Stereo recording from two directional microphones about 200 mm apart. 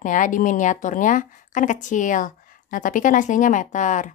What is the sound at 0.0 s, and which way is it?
A woman's voice, 40° left (ahead or behind).